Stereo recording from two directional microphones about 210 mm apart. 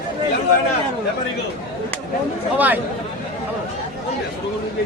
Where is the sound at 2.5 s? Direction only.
10° right (ahead or behind).